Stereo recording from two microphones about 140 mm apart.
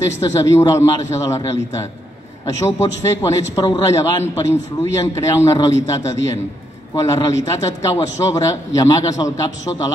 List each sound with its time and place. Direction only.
0.0 s a man's voice: 20° left (ahead or behind)